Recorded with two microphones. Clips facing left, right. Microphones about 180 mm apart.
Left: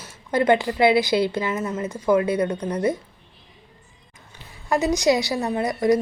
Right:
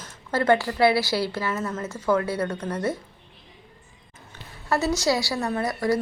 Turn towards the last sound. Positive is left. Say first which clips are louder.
# left 4 dB
turn(degrees=20)  # may be behind; listen again after turning